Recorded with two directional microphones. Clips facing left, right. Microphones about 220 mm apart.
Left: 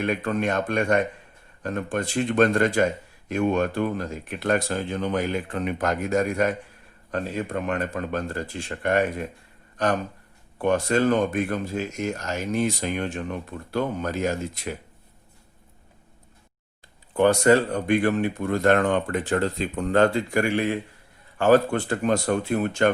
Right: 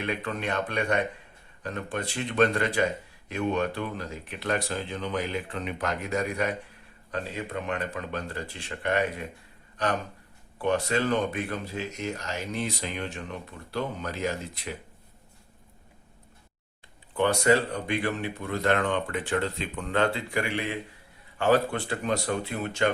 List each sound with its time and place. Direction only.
0.0 s speech: 45° left (ahead or behind)
10.6 s speech: 45° left (ahead or behind)
17.2 s speech: 45° left (ahead or behind)